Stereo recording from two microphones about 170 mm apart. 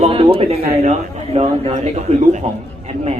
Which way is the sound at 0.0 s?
35° right (ahead or behind).